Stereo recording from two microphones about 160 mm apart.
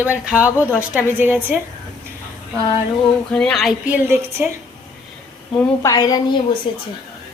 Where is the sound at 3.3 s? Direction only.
5° left (ahead or behind); by 4.5 s 15° right (ahead or behind).